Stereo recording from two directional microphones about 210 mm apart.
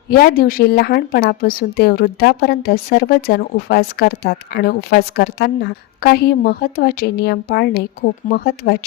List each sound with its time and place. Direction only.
0.2 s a woman's voice: 45° left (ahead or behind)